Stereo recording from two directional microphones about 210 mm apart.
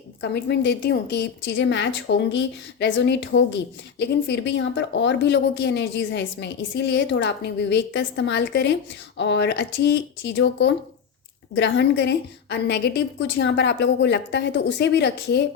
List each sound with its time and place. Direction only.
0.2 s a woman's voice: 55° left (ahead or behind)